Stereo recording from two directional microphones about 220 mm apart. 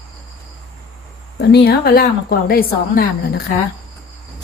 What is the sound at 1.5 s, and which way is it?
A woman's voice, 45° left (ahead or behind).